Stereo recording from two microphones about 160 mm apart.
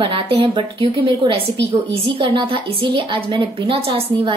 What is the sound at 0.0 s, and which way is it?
A woman's voice, 35° right (ahead or behind).